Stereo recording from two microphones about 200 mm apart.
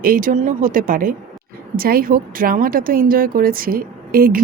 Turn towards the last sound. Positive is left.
turn(degrees=-45)  # may be behind; listen again after turning